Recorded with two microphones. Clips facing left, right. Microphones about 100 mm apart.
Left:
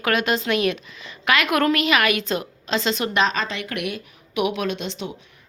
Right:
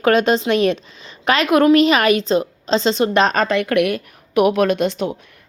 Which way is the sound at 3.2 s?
50° right (ahead or behind).